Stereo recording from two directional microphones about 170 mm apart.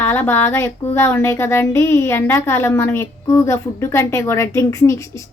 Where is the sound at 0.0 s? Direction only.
15° left (ahead or behind).